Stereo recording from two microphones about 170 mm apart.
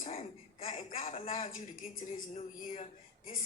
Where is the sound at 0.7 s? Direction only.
50° left (ahead or behind).